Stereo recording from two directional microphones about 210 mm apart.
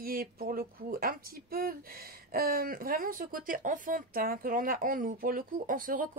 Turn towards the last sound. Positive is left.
turn(degrees=-40)  # may be behind; listen again after turning